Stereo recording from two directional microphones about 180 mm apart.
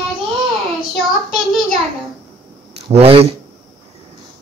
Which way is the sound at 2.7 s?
35° right (ahead or behind).